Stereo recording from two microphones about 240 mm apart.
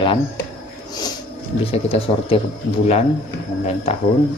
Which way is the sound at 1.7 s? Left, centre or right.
Left.